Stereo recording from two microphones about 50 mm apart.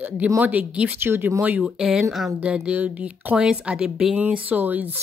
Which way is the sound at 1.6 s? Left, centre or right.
Centre.